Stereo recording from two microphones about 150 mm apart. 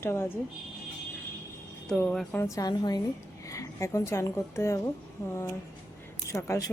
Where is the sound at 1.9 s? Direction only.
5° left (ahead or behind).